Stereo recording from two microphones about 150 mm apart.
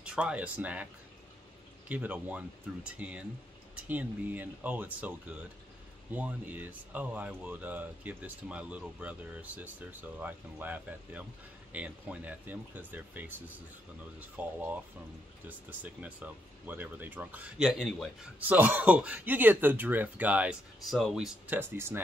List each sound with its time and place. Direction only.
0.0 s speech: 5° right (ahead or behind)
1.9 s speech: 10° right (ahead or behind)
14.3 s speech: 10° right (ahead or behind)
18.5 s speech: 10° right (ahead or behind)
21.5 s speech: 15° right (ahead or behind)